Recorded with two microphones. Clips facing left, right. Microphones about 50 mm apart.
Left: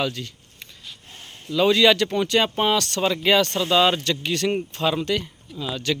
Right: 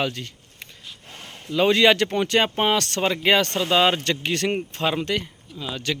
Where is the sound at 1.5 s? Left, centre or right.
Right.